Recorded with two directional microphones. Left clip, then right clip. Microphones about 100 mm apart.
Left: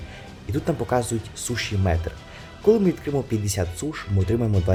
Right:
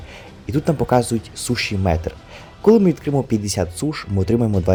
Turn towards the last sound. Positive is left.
turn(degrees=-45)  # may be behind; listen again after turning